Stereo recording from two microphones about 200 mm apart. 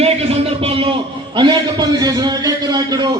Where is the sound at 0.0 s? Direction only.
30° right (ahead or behind).